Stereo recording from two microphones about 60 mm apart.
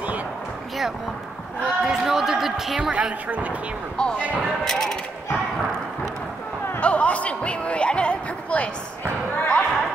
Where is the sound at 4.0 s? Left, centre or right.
Centre.